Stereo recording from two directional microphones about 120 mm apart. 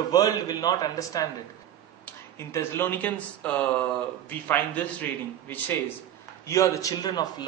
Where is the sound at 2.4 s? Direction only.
20° left (ahead or behind).